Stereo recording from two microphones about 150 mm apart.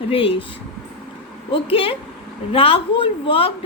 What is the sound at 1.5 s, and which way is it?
A woman's voice, 40° left (ahead or behind).